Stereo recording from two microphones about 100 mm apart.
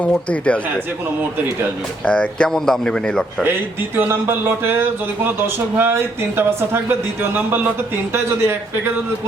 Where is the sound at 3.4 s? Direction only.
20° right (ahead or behind).